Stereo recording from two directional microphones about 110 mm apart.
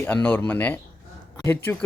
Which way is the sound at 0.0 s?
20° left (ahead or behind).